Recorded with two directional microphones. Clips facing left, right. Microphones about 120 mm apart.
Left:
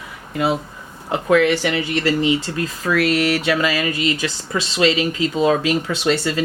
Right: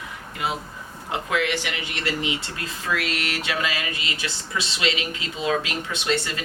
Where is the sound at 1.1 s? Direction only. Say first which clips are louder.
Left 9 dB; 40° left (ahead or behind).